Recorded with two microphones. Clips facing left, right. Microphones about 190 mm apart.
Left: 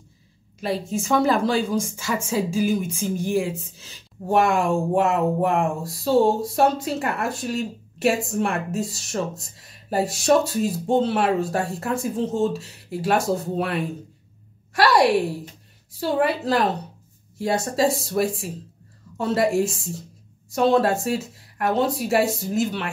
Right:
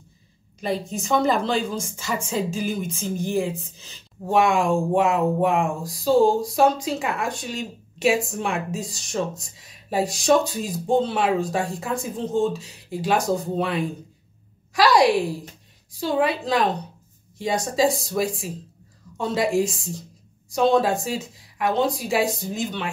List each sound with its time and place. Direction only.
0.6 s a woman's voice: 5° left (ahead or behind)
16.0 s a woman's voice: 5° left (ahead or behind)